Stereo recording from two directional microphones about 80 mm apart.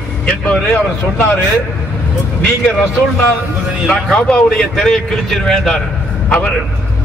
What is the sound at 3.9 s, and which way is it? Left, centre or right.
A man's voice, centre.